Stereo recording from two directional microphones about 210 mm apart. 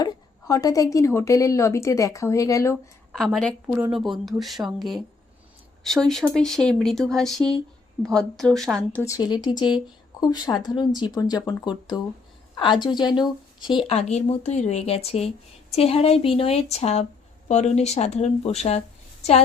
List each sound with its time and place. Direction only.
0.0 s a woman's voice: 15° left (ahead or behind)
3.1 s a woman's voice: centre (ahead or behind); by 18.8 s 30° left (ahead or behind)